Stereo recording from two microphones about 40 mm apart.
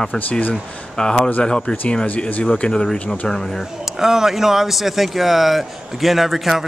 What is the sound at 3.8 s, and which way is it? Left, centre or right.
Speech, centre.